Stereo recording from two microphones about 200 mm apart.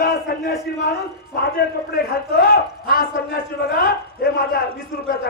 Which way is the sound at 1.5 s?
50° left (ahead or behind).